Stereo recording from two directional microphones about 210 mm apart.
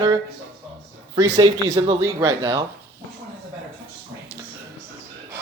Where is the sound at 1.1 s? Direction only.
20° right (ahead or behind).